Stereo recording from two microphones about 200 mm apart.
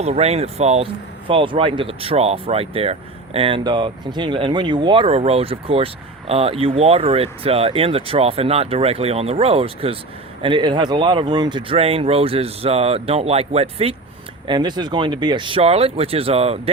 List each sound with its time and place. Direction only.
0.0 s speech: 30° right (ahead or behind)